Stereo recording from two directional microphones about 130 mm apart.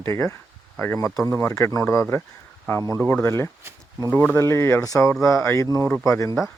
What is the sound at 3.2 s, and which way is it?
Speech, 20° left (ahead or behind).